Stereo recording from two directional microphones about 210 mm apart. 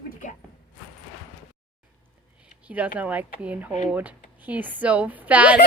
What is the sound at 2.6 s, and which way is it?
A woman's voice, 5° right (ahead or behind).